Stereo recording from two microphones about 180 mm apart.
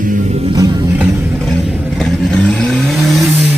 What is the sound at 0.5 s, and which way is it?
Music, 20° right (ahead or behind).